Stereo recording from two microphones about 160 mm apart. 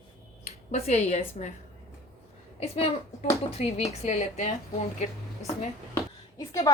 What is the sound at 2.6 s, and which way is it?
A woman's voice, 40° left (ahead or behind).